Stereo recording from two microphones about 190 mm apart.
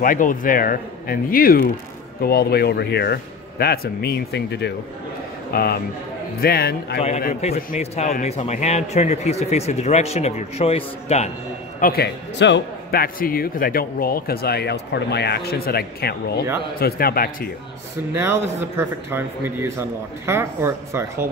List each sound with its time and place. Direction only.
0.0 s speech: 45° left (ahead or behind)
7.4 s a man's voice: 35° left (ahead or behind)
11.8 s a man's voice: 55° left (ahead or behind)
13.0 s speech: 50° left (ahead or behind)
18.1 s a man's voice: 15° right (ahead or behind)